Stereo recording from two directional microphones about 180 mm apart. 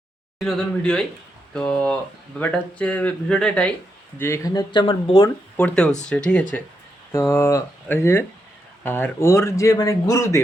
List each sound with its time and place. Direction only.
0.3 s speech: centre (ahead or behind)
4.2 s speech: 15° left (ahead or behind)
5.5 s speech: 5° left (ahead or behind)